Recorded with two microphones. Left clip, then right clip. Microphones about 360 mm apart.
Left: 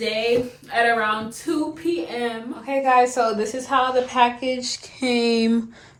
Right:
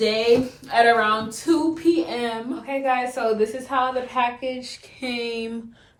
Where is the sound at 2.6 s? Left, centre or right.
Centre.